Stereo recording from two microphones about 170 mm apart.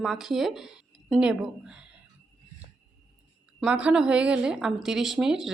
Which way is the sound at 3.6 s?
5° right (ahead or behind).